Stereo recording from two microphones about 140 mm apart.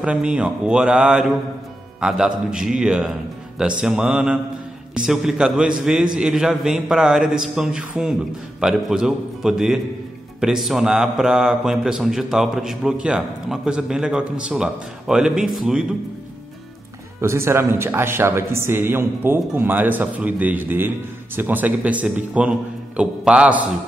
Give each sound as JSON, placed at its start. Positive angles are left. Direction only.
{"t": 0.0, "sound": "a man's voice", "side_deg": -10}
{"t": 17.2, "sound": "a man's voice", "side_deg": -20}